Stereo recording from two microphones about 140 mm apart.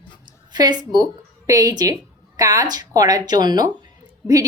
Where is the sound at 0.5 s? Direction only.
30° right (ahead or behind).